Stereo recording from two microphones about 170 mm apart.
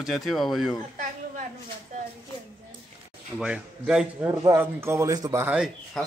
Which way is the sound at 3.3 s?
5° right (ahead or behind).